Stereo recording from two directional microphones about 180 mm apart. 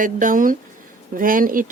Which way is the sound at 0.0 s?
50° right (ahead or behind).